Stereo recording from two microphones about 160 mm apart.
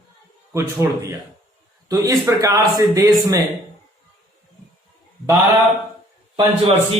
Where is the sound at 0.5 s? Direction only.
15° right (ahead or behind).